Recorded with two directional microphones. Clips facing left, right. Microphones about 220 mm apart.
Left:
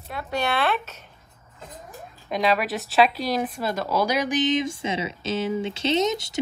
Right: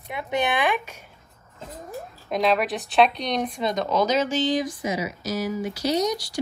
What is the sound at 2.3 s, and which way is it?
Speech, centre (ahead or behind).